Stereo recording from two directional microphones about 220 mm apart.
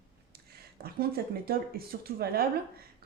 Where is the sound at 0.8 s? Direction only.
45° right (ahead or behind).